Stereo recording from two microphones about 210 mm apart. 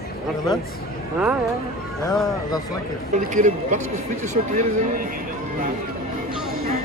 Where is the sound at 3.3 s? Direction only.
35° right (ahead or behind).